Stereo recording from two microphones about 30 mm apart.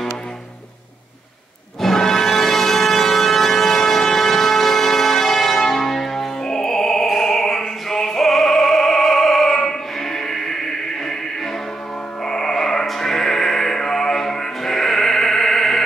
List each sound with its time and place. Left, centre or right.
1.8 s music: centre
7.2 s opera: centre
7.9 s music: centre
12.3 s music: centre